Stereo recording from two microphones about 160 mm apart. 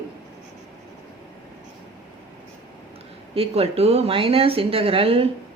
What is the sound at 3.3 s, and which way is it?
Speech, 40° right (ahead or behind).